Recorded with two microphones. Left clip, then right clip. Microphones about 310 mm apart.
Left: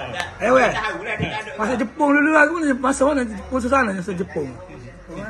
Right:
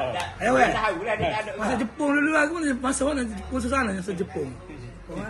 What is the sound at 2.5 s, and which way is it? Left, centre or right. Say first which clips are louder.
A man's voice: left 6 dB; left.